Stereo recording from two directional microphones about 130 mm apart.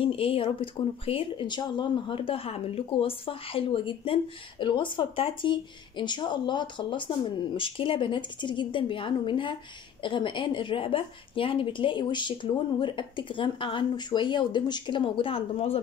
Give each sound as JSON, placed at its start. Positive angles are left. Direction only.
{"t": 0.0, "sound": "speech", "side_deg": 45}